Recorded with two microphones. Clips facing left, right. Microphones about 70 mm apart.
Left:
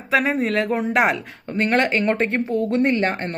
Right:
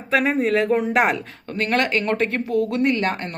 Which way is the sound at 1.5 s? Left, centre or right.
Left.